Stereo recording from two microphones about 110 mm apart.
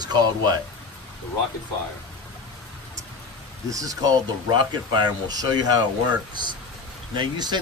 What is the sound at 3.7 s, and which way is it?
Speech, 30° right (ahead or behind).